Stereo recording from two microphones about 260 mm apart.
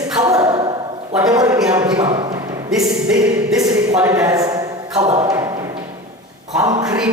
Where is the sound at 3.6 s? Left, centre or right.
Centre.